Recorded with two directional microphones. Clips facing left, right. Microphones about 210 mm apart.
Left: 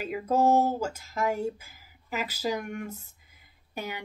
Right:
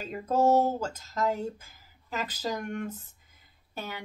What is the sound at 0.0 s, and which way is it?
Speech, 10° left (ahead or behind).